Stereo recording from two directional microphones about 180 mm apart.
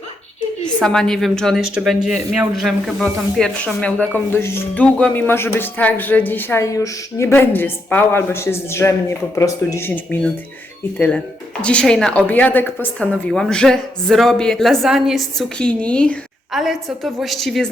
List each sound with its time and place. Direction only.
0.8 s a woman's voice: 5° left (ahead or behind)